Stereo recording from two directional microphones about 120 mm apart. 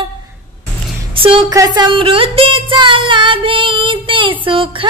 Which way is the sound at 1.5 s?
30° right (ahead or behind).